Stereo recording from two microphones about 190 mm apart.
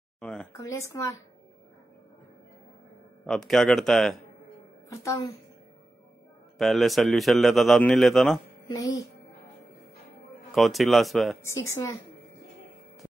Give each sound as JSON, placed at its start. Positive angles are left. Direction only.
{"t": 0.2, "sound": "a sound", "side_deg": 5}
{"t": 0.5, "sound": "speech", "side_deg": 15}
{"t": 3.3, "sound": "a man's voice", "side_deg": 0}
{"t": 4.8, "sound": "a woman's voice", "side_deg": 15}
{"t": 6.6, "sound": "a man's voice", "side_deg": 0}
{"t": 8.6, "sound": "speech", "side_deg": 15}
{"t": 10.5, "sound": "a man's voice", "side_deg": 0}
{"t": 11.7, "sound": "speech", "side_deg": 15}